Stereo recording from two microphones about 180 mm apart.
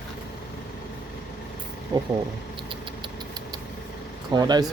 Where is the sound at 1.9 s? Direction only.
25° right (ahead or behind).